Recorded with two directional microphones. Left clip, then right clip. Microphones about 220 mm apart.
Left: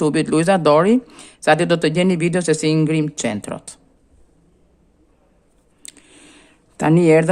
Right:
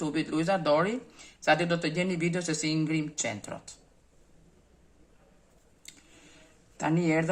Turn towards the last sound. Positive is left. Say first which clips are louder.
# left 14 dB
turn(degrees=50)  # may be behind; listen again after turning